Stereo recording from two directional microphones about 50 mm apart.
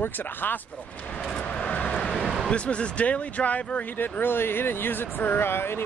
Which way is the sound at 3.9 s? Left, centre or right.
Left.